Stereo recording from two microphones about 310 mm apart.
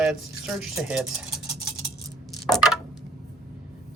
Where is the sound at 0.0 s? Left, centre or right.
Centre.